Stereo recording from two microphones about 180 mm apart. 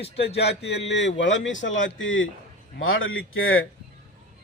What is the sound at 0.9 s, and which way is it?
A man's voice, 80° left.